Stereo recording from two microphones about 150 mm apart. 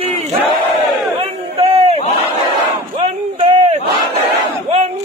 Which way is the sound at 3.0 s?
45° right (ahead or behind).